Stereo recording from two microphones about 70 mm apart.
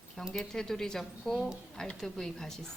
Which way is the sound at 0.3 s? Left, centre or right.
Centre.